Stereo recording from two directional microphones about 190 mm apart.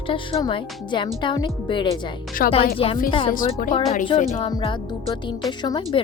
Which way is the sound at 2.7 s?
30° left (ahead or behind).